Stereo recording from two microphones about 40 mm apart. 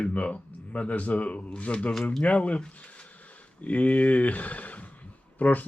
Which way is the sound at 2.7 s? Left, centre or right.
Left.